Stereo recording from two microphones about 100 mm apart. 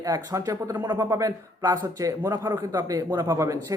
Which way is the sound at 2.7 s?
40° right (ahead or behind).